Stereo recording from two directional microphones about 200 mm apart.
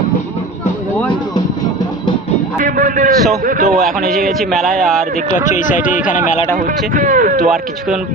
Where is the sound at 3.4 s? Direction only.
45° right (ahead or behind).